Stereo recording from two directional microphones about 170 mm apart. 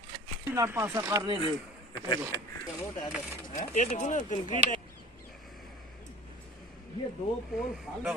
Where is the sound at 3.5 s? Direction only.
45° left (ahead or behind).